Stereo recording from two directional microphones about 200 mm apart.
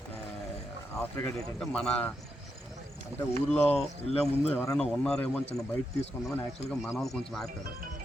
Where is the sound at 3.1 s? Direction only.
5° left (ahead or behind).